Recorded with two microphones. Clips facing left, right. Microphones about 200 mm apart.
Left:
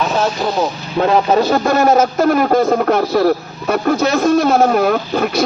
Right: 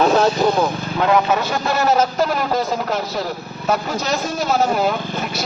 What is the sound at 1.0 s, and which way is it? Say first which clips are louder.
A man's voice: left 4 dB; 35° left (ahead or behind).